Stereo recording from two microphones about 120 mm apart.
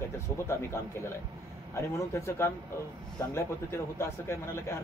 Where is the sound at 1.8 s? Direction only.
25° left (ahead or behind).